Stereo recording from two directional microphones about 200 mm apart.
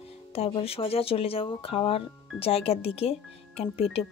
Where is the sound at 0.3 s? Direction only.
30° left (ahead or behind).